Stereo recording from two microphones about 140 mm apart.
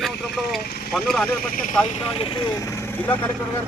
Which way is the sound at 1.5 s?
75° left (ahead or behind).